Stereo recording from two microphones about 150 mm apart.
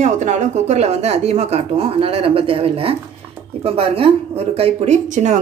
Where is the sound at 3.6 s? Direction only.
40° right (ahead or behind).